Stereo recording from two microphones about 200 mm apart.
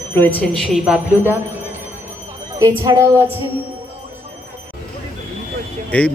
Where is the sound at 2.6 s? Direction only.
15° right (ahead or behind).